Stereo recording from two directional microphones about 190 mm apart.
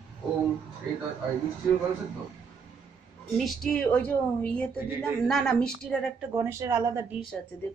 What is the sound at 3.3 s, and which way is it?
A woman's voice, centre (ahead or behind).